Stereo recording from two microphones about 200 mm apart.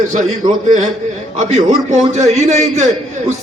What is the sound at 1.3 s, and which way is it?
A man's voice, 35° right (ahead or behind).